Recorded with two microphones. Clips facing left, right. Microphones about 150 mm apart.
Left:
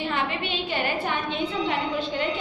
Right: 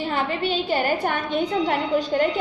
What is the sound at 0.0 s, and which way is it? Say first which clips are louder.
A woman's voice: right 3 dB; 35° right (ahead or behind).